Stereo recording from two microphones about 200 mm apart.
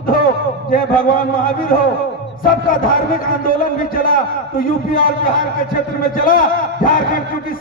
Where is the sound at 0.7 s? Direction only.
45° left (ahead or behind).